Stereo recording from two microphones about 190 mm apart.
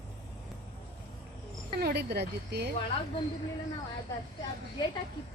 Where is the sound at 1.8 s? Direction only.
60° right (ahead or behind).